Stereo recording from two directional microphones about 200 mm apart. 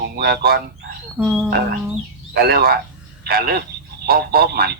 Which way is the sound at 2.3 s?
50° right (ahead or behind).